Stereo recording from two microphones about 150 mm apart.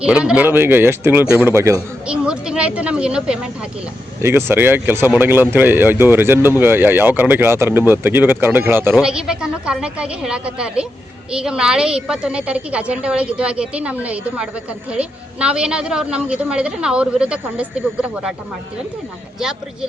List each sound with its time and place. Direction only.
0.0 s a woman's voice: 5° right (ahead or behind)
2.0 s speech: 5° right (ahead or behind)
4.2 s a woman's voice: 15° right (ahead or behind)
19.4 s speech: 5° right (ahead or behind)